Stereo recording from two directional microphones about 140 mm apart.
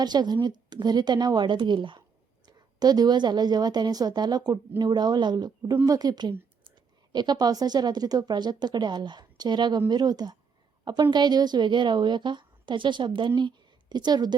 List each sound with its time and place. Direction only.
0.0 s a woman's voice: 30° right (ahead or behind)